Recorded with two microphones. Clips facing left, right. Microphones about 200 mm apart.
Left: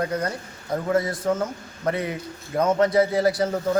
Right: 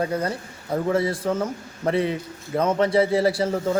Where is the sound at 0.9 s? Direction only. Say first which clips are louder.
Even; 30° right (ahead or behind).